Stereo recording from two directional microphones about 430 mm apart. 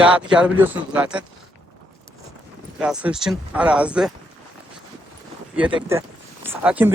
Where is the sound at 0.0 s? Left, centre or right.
Centre.